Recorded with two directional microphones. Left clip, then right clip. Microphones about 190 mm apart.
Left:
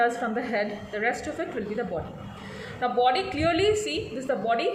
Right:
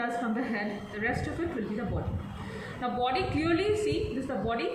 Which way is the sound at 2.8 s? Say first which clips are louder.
Left 6 dB; 50° left (ahead or behind).